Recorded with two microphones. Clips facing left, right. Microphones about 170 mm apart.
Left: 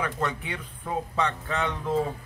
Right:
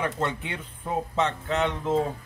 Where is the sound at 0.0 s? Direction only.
25° right (ahead or behind).